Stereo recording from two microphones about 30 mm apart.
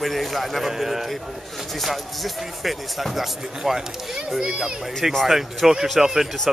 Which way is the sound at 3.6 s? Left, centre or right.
Centre.